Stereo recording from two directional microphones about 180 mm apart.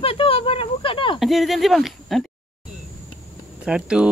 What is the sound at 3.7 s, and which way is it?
Speech, 5° right (ahead or behind).